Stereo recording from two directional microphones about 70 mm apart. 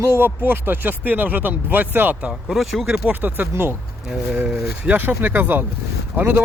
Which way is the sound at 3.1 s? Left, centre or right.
Right.